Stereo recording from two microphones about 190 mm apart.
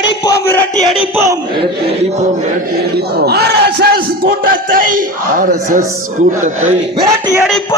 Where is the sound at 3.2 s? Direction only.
55° right (ahead or behind).